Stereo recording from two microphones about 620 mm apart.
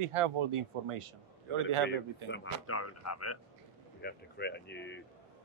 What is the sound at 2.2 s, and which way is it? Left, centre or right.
Speech, centre.